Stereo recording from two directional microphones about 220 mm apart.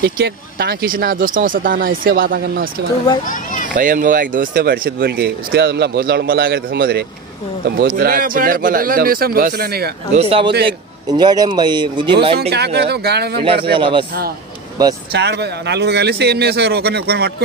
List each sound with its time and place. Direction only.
0.0 s speech: 45° right (ahead or behind)
3.3 s children playing: 35° left (ahead or behind)
3.7 s speech: 35° right (ahead or behind)
10.6 s a man's voice: 20° right (ahead or behind)
12.4 s speech: 50° right (ahead or behind)
13.7 s a man's voice: 25° right (ahead or behind)
15.1 s speech: 50° right (ahead or behind)